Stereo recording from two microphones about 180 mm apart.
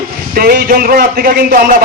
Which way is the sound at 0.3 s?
55° right (ahead or behind).